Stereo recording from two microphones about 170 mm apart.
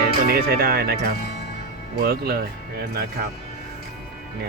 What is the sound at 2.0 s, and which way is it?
Speech, 65° right (ahead or behind).